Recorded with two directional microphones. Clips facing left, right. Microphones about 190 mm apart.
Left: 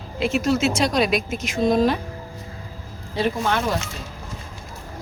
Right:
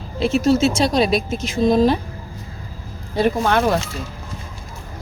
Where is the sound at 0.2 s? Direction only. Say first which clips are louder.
Right 4 dB; 30° right (ahead or behind).